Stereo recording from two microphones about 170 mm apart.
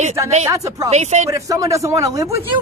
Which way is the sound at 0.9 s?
40° right (ahead or behind).